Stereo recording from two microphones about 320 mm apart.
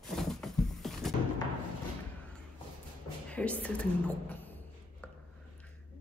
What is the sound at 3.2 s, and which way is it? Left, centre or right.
Speech, centre.